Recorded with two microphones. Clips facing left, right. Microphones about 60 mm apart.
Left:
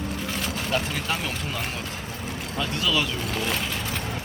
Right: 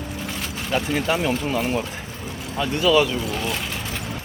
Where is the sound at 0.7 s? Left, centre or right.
Centre.